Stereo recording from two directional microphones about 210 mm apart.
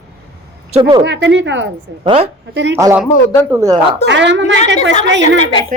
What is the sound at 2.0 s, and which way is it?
Speech, 30° right (ahead or behind).